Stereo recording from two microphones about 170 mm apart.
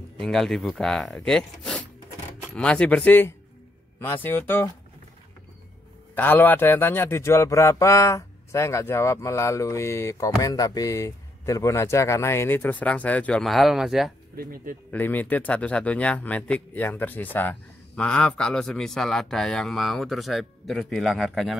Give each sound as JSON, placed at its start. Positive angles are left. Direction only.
{"t": 0.2, "sound": "a man's voice", "side_deg": 0}
{"t": 6.1, "sound": "a man's voice", "side_deg": 10}
{"t": 14.3, "sound": "speech", "side_deg": -60}
{"t": 14.9, "sound": "speech", "side_deg": 10}